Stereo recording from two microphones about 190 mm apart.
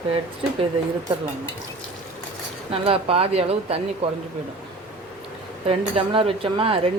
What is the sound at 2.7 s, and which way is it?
Speech, 30° right (ahead or behind).